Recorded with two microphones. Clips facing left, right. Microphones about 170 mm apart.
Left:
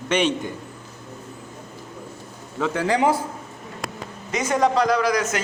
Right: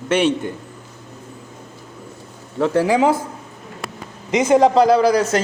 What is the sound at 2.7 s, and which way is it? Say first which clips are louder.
Speech: right 6 dB; 10° right (ahead or behind).